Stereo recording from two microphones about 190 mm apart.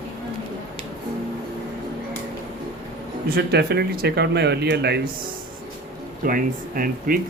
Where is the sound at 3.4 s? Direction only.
60° right (ahead or behind).